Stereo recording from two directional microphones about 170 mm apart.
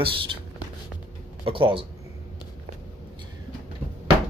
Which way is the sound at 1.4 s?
30° right (ahead or behind).